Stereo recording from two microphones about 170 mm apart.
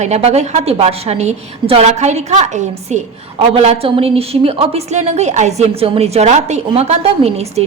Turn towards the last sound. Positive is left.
turn(degrees=-40)  # may be behind; listen again after turning